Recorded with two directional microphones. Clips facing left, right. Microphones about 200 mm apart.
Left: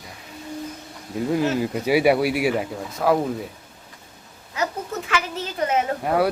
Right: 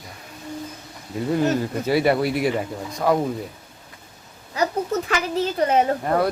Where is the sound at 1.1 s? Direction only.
5° left (ahead or behind).